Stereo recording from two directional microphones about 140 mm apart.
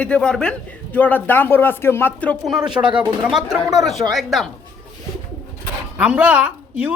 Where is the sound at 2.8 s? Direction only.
20° right (ahead or behind).